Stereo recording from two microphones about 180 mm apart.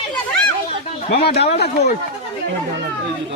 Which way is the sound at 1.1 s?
65° left (ahead or behind).